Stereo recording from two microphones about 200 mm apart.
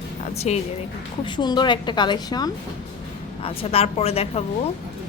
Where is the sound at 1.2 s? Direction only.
20° left (ahead or behind).